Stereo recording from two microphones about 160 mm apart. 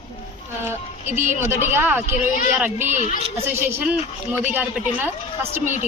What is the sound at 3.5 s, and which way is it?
A woman's voice, 10° right (ahead or behind).